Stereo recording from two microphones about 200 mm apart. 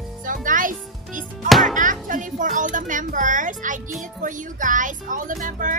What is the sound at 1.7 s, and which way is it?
A child's voice, 40° right (ahead or behind).